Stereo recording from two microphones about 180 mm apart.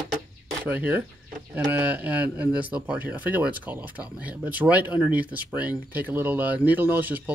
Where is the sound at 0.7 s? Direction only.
10° right (ahead or behind).